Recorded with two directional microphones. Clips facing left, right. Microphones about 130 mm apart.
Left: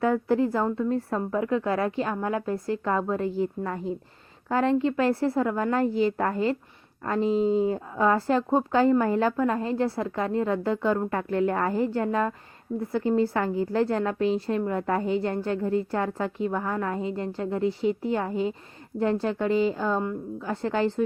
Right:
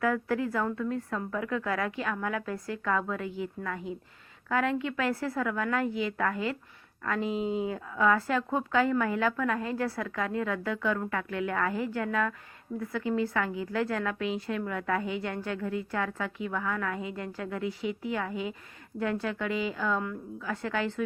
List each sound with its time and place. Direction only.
0.0 s a woman's voice: 30° left (ahead or behind)